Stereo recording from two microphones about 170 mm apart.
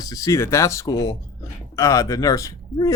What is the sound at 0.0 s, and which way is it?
Speech, 20° left (ahead or behind).